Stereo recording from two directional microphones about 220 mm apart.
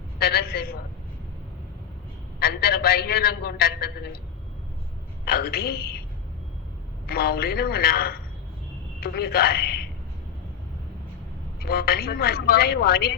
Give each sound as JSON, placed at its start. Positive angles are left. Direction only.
{"t": 0.2, "sound": "a man's voice", "side_deg": 45}
{"t": 2.4, "sound": "a man's voice", "side_deg": 45}
{"t": 5.2, "sound": "a man's voice", "side_deg": 45}
{"t": 7.1, "sound": "a man's voice", "side_deg": 45}
{"t": 11.6, "sound": "a man's voice", "side_deg": 45}